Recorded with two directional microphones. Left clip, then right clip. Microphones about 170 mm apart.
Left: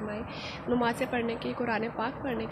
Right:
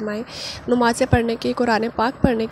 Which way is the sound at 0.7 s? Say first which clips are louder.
Right 11 dB; 55° right (ahead or behind).